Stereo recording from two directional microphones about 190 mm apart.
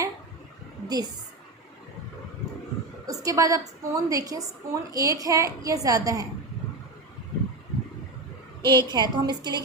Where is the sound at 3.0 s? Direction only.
20° right (ahead or behind).